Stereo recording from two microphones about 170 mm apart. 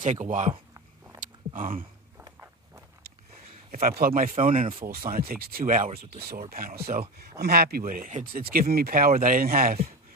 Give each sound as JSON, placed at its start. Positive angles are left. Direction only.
{"t": 0.0, "sound": "speech", "side_deg": -45}
{"t": 0.7, "sound": "a sound", "side_deg": -20}
{"t": 1.2, "sound": "a sound", "side_deg": -50}
{"t": 3.7, "sound": "speech", "side_deg": -60}
{"t": 4.6, "sound": "speech", "side_deg": -35}
{"t": 4.8, "sound": "speech", "side_deg": -60}